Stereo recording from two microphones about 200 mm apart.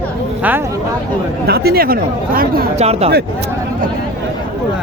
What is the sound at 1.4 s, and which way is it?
Speech, 50° right (ahead or behind).